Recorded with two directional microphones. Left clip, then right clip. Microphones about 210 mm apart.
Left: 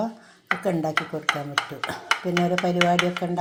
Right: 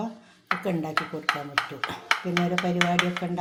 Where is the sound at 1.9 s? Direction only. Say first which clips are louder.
Left 3 dB; 25° left (ahead or behind).